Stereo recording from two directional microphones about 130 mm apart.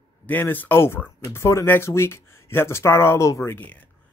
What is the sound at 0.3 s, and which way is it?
Speech, 15° left (ahead or behind).